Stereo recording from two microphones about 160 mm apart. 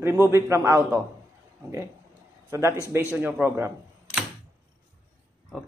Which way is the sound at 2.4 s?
20° right (ahead or behind).